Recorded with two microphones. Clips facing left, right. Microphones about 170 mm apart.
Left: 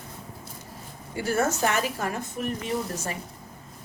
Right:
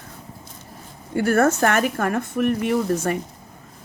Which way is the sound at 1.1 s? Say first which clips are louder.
Right 8 dB; 55° right (ahead or behind).